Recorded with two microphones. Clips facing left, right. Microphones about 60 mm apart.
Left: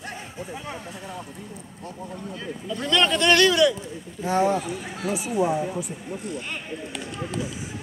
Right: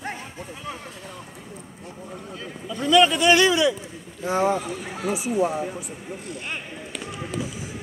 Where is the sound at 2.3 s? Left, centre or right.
Centre.